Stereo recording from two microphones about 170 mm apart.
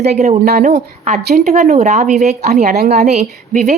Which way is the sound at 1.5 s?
40° right (ahead or behind).